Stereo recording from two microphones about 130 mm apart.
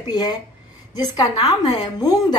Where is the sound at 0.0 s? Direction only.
30° left (ahead or behind).